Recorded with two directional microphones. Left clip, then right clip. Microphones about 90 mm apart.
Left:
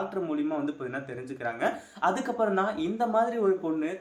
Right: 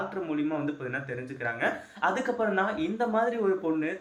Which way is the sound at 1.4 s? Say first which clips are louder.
Even; 30° left (ahead or behind).